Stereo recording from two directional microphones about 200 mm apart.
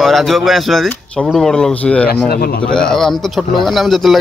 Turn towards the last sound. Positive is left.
turn(degrees=0)  # may be behind; listen again after turning